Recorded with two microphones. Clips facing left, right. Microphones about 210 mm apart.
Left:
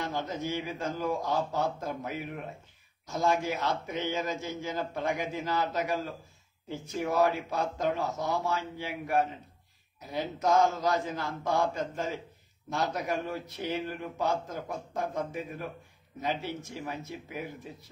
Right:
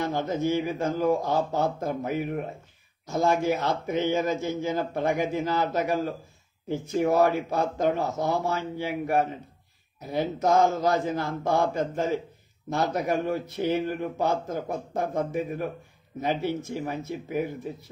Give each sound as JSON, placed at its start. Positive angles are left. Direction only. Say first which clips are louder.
{"t": 0.0, "sound": "a man's voice", "louder": "right 7 dB", "side_deg": -50}
{"t": 7.0, "sound": "a man's voice", "louder": "right 5 dB", "side_deg": -50}